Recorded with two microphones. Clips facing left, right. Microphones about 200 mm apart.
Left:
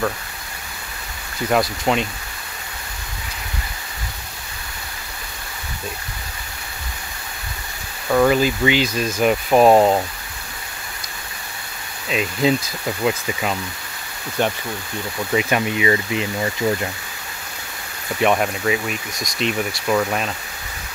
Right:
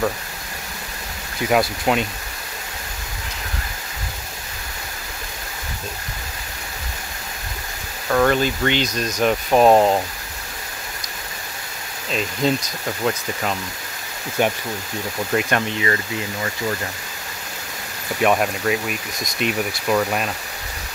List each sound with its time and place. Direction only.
1.5 s speech: 5° right (ahead or behind)
8.1 s speech: 5° left (ahead or behind)
12.1 s speech: 5° left (ahead or behind)
14.4 s speech: 10° right (ahead or behind)
15.3 s speech: 10° left (ahead or behind)
18.2 s speech: centre (ahead or behind)